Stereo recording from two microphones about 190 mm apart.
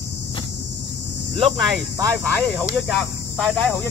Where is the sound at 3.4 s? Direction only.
Centre (ahead or behind).